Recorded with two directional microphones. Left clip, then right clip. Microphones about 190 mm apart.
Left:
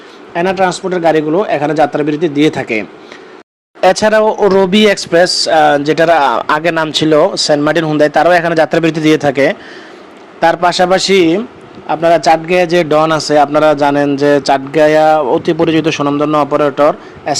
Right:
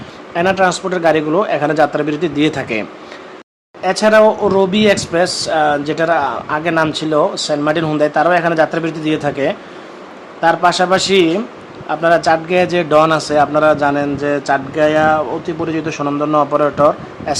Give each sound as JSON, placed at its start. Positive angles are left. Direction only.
{"t": 0.3, "sound": "speech", "side_deg": 15}
{"t": 3.8, "sound": "a man's voice", "side_deg": 45}
{"t": 6.8, "sound": "a man's voice", "side_deg": 35}